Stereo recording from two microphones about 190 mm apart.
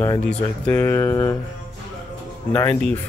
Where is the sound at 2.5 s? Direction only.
10° left (ahead or behind).